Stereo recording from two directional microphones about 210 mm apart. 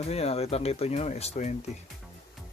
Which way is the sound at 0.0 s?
30° left (ahead or behind).